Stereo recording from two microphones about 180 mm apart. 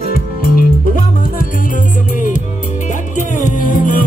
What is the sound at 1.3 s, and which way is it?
Music, 45° left (ahead or behind).